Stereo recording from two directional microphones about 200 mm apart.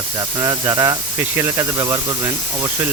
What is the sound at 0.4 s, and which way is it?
Speech, 15° right (ahead or behind).